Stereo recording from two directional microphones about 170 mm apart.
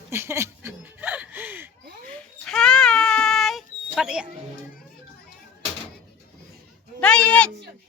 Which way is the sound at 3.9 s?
5° right (ahead or behind).